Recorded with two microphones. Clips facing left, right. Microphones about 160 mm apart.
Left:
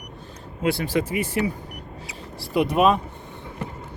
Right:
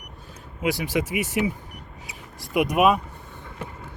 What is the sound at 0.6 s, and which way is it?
Speech, 15° right (ahead or behind).